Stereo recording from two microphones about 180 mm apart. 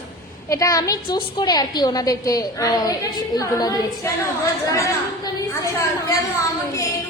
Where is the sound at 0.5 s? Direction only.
20° left (ahead or behind).